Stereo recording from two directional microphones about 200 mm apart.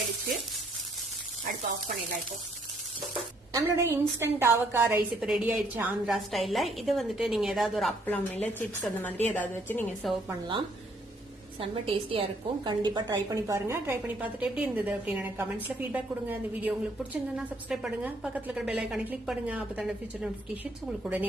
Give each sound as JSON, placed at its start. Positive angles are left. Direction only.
{"t": 3.5, "sound": "a woman's voice", "side_deg": -10}
{"t": 11.6, "sound": "a woman's voice", "side_deg": -25}